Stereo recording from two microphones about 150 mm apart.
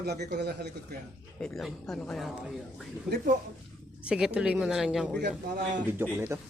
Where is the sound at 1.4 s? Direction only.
5° left (ahead or behind).